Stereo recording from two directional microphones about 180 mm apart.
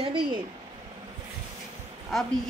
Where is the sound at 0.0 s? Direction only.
25° right (ahead or behind).